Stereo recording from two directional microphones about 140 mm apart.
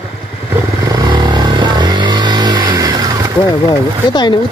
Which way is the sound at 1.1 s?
35° right (ahead or behind).